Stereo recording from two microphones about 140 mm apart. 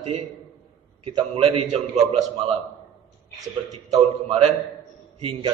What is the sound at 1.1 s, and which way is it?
Speech, 35° right (ahead or behind).